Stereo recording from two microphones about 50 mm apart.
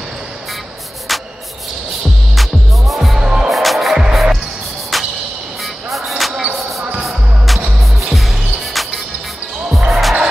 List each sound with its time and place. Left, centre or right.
2.9 s music: centre
3.2 s music: centre
3.4 s music: centre